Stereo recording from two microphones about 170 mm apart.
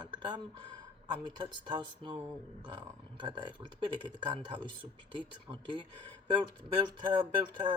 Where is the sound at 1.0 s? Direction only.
25° right (ahead or behind).